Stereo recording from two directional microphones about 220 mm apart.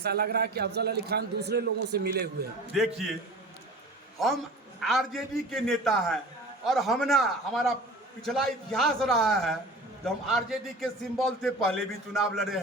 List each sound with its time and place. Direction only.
0.0 s a man's voice: 45° right (ahead or behind)
2.7 s a man's voice: centre (ahead or behind)
4.8 s a man's voice: centre (ahead or behind)